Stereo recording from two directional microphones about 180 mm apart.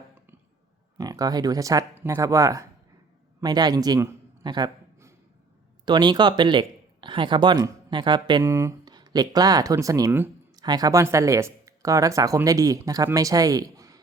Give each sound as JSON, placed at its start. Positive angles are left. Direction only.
{"t": 0.9, "sound": "a man's voice", "side_deg": -20}